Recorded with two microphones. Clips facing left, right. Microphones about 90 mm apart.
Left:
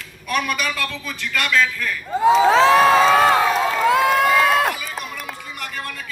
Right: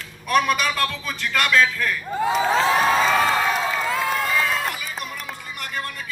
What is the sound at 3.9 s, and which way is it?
Crowd, 65° left (ahead or behind).